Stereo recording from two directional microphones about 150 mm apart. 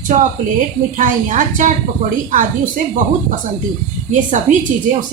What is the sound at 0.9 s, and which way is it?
Speech, 60° right (ahead or behind).